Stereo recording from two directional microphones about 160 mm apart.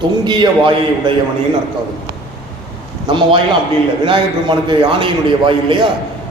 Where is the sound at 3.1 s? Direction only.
30° right (ahead or behind).